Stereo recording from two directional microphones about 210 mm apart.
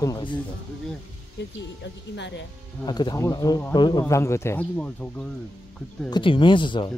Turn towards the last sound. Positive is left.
turn(degrees=25)  # may be behind; listen again after turning